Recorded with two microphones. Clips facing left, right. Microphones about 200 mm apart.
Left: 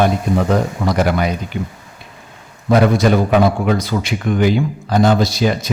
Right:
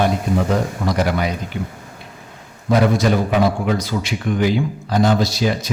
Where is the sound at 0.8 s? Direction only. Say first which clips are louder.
Left 3 dB; 65° left (ahead or behind).